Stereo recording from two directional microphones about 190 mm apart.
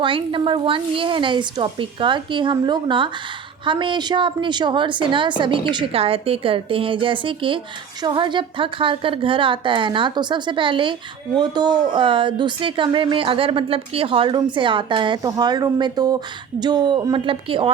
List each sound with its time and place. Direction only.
0.0 s speech: 25° right (ahead or behind)